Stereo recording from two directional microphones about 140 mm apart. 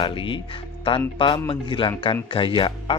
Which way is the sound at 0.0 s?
40° left (ahead or behind).